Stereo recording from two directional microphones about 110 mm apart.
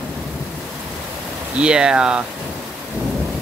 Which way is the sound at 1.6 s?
5° right (ahead or behind).